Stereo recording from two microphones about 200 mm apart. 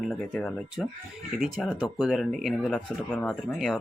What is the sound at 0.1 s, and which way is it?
Speech, centre (ahead or behind).